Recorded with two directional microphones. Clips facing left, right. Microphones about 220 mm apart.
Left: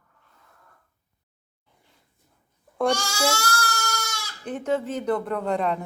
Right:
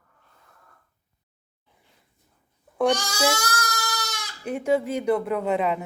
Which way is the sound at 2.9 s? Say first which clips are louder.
Right 1 dB; 15° right (ahead or behind).